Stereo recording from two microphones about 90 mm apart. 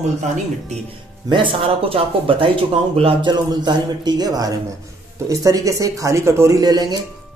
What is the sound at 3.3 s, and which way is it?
A man's voice, 55° right (ahead or behind).